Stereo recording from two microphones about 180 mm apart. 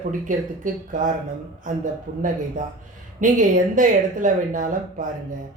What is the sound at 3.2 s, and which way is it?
Speech, 45° right (ahead or behind).